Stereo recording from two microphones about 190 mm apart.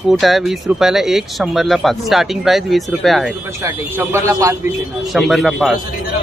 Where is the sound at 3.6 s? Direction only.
10° right (ahead or behind).